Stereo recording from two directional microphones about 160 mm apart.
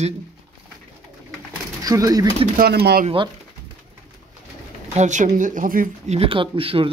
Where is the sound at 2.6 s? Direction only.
85° right.